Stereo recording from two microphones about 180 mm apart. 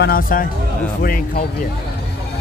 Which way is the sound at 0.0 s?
55° left (ahead or behind).